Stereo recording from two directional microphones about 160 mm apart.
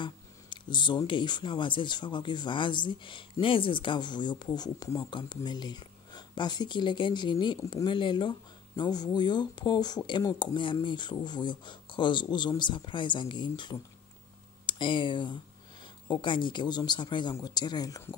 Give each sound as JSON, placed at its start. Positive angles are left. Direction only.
{"t": 0.0, "sound": "speech", "side_deg": 30}